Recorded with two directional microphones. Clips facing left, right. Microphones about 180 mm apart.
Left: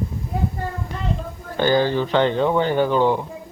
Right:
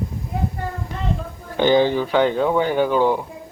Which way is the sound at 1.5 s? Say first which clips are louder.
Right 2 dB; 15° right (ahead or behind).